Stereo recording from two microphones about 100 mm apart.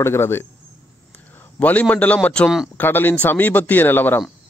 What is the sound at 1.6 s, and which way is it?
A man's voice, 15° left (ahead or behind).